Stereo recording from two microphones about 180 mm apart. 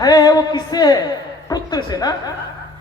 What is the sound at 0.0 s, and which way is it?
A woman's voice, 20° left (ahead or behind).